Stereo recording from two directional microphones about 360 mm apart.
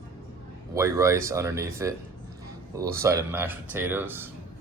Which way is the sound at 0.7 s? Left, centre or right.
Centre.